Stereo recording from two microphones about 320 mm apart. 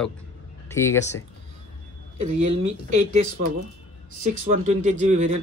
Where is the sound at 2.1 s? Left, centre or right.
Right.